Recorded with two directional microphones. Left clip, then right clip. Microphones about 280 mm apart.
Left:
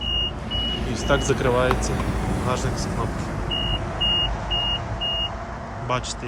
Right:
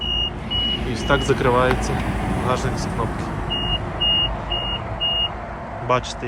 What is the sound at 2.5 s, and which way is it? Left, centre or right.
Speech, centre.